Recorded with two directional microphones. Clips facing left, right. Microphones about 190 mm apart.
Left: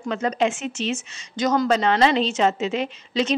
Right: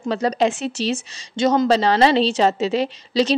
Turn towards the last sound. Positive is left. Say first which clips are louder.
# right 4 dB
turn(degrees=-35)  # may be behind; listen again after turning